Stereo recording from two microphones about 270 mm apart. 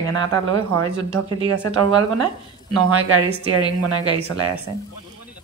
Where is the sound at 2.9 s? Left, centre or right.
Right.